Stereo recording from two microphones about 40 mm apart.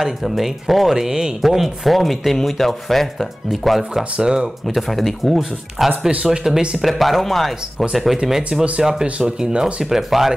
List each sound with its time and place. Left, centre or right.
0.0 s speech: centre
4.2 s speech: right
4.6 s speech: centre
5.9 s speech: right
6.8 s speech: centre; by 9.7 s right
9.8 s speech: centre